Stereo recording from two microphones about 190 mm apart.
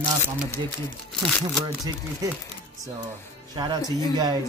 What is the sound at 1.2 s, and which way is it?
Speech, centre (ahead or behind).